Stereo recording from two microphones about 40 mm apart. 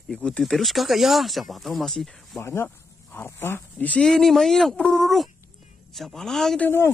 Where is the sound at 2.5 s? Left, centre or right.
Left.